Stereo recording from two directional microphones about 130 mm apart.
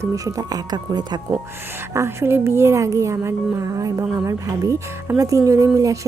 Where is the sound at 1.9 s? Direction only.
20° right (ahead or behind).